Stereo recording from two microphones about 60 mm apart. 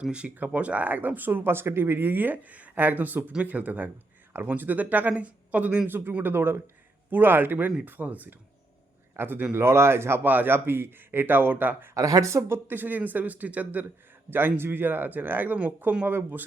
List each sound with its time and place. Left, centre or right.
0.0 s speech: centre; by 9.6 s right
9.6 s speech: right
10.2 s speech: right
11.9 s speech: right
12.5 s speech: right